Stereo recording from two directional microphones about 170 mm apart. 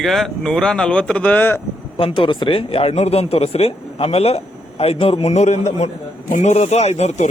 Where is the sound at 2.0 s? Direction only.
30° left (ahead or behind).